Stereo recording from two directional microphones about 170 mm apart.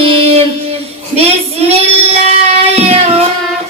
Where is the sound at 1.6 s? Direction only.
35° right (ahead or behind).